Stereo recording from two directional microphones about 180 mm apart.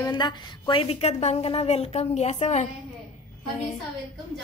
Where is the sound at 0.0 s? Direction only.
25° left (ahead or behind); by 2.7 s 40° left (ahead or behind).